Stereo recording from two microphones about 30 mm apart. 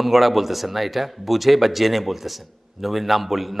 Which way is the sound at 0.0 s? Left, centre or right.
Centre.